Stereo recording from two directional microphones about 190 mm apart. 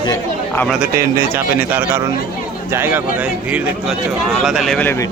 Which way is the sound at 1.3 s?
10° right (ahead or behind).